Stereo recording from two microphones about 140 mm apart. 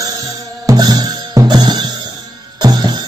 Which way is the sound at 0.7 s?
30° right (ahead or behind).